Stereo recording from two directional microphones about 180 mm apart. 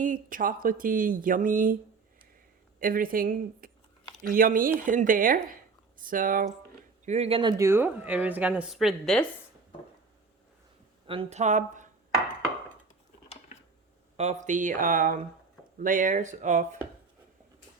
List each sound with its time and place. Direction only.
0.0 s speech: 50° right (ahead or behind)
2.8 s speech: 50° right (ahead or behind)
7.0 s speech: 40° right (ahead or behind)
7.6 s speech: 10° right (ahead or behind)
11.0 s speech: 30° right (ahead or behind)
13.2 s dishes: 35° left (ahead or behind)
14.2 s speech: 40° right (ahead or behind)